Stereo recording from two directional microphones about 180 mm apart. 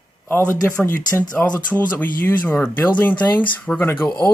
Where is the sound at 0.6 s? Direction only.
15° left (ahead or behind).